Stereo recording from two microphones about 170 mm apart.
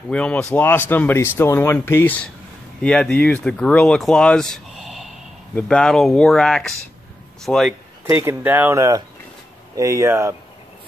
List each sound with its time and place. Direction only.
0.1 s speech: 5° left (ahead or behind)
8.0 s speech: 15° right (ahead or behind)